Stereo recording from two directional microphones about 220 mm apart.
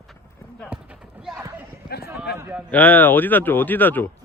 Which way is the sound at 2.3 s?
10° right (ahead or behind).